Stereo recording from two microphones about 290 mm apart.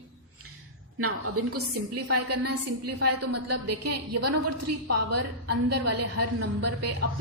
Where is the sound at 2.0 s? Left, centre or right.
Right.